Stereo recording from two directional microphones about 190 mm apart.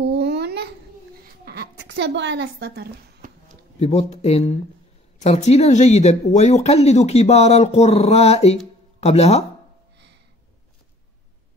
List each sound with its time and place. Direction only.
0.0 s babbling: 65° right (ahead or behind)
1.4 s a woman's voice: 60° right (ahead or behind)
3.8 s speech: 35° left (ahead or behind)